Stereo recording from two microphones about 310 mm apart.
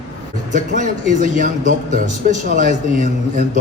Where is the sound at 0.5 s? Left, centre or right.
Right.